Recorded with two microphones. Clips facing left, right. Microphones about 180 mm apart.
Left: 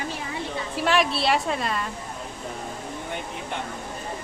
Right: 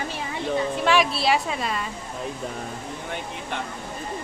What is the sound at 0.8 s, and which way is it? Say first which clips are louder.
A woman's voice: left 1 dB; centre (ahead or behind).